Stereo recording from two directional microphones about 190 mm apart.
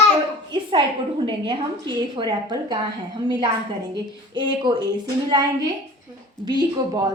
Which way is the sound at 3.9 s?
25° right (ahead or behind).